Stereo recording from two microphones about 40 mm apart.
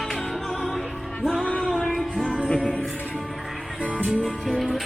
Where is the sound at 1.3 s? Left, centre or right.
Left.